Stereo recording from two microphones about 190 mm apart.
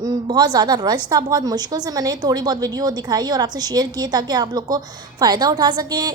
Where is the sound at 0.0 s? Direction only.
20° right (ahead or behind).